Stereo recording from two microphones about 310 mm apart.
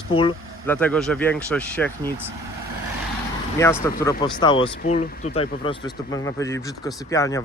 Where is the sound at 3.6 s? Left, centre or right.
Centre.